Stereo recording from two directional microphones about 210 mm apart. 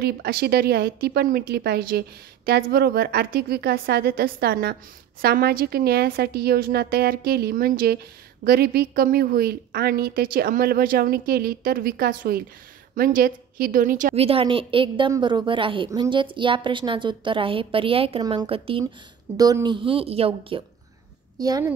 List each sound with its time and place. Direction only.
0.0 s a woman's voice: 45° right (ahead or behind); by 21.7 s 15° right (ahead or behind)